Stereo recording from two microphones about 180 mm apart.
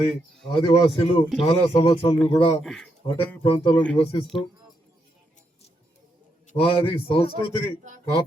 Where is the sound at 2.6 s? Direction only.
Centre (ahead or behind).